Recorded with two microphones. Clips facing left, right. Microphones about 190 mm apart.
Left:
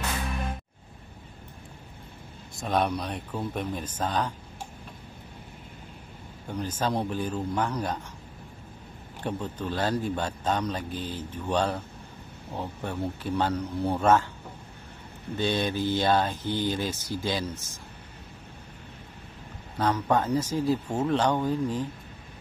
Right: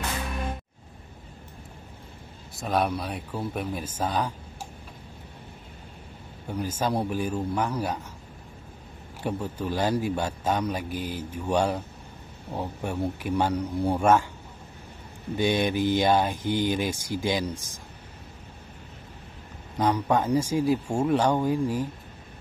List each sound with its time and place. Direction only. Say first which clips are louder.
2.5 s speech: right 1 dB; centre (ahead or behind)
6.5 s speech: right 1 dB; 10° right (ahead or behind)
9.2 s speech: right 2 dB; 10° right (ahead or behind)
15.3 s speech: right 3 dB; 15° right (ahead or behind)
19.8 s speech: right 1 dB; 10° right (ahead or behind)